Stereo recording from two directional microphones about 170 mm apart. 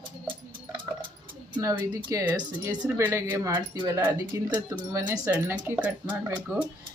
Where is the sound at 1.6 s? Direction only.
20° right (ahead or behind).